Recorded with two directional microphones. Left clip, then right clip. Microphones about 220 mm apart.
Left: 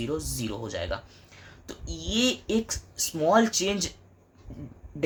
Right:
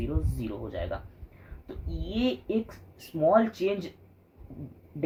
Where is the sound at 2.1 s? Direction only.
35° left (ahead or behind).